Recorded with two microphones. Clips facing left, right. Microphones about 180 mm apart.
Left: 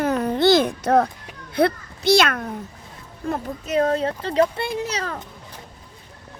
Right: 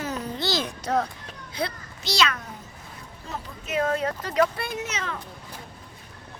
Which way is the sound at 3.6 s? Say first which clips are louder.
Left 5 dB; 35° left (ahead or behind).